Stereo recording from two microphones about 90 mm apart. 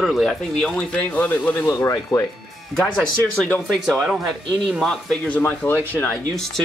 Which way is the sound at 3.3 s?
15° left (ahead or behind).